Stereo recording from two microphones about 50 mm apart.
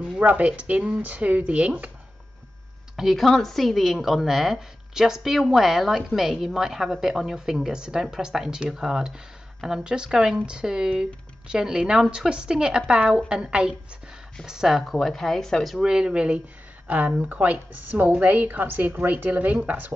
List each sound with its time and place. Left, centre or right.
0.0 s speech: right
3.0 s a woman's voice: centre
15.8 s a woman's voice: centre; by 19.9 s right